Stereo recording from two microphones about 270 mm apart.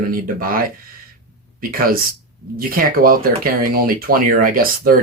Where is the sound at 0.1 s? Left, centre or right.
Right.